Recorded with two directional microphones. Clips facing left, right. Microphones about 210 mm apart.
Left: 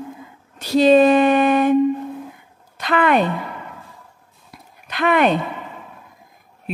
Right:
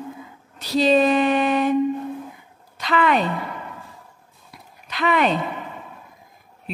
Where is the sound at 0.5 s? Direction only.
50° left (ahead or behind).